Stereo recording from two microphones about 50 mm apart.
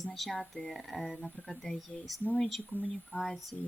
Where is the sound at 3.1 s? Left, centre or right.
Left.